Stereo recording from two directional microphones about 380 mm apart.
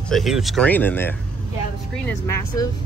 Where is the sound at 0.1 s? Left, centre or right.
Centre.